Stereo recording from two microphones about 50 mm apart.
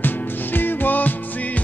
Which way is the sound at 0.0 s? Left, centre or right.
Left.